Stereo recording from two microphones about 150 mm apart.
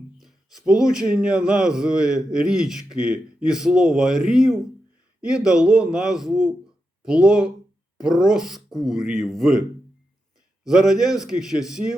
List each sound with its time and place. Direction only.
0.2 s speech: centre (ahead or behind)